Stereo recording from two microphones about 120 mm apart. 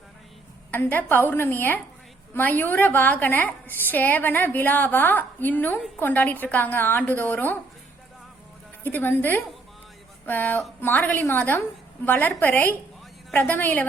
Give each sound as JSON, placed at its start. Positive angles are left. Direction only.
{"t": 0.7, "sound": "a woman's voice", "side_deg": 15}
{"t": 8.8, "sound": "a woman's voice", "side_deg": 15}